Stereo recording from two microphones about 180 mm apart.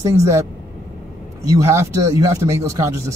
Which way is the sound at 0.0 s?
15° right (ahead or behind).